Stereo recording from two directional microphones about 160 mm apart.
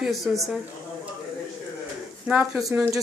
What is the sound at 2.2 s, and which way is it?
Speech, 10° right (ahead or behind).